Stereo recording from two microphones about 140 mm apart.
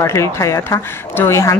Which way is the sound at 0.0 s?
20° left (ahead or behind).